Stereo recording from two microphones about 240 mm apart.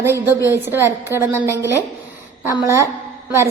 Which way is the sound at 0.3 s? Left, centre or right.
Centre.